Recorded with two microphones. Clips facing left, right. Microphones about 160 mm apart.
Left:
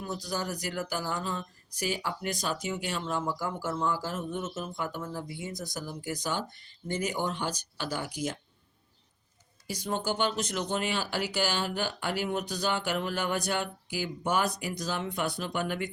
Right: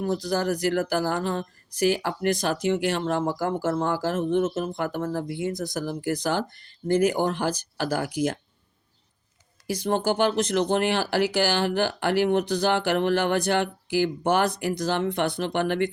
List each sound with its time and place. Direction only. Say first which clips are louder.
0.0 s speech: right 10 dB; 55° right (ahead or behind)
0.3 s speech: right 9 dB; 70° right (ahead or behind)
0.9 s speech: right 8 dB; 80° right
4.4 s speech: right 11 dB; 55° right (ahead or behind)
4.7 s speech: right 8 dB; 70° right (ahead or behind)
5.7 s speech: right 9 dB; 70° right (ahead or behind)
9.8 s speech: right 7 dB; 70° right (ahead or behind)